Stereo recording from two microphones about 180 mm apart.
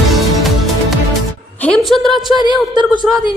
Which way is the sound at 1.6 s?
5° left (ahead or behind).